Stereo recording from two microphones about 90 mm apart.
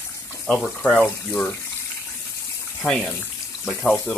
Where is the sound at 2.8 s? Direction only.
5° left (ahead or behind).